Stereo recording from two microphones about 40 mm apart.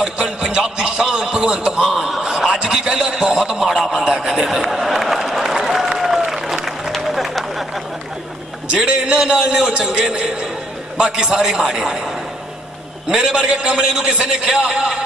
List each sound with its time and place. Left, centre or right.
0.0 s a sound: centre
1.8 s a man's voice: centre
2.2 s a man's voice: centre
4.3 s applause: centre
8.7 s a man's voice: right
13.1 s a man's voice: centre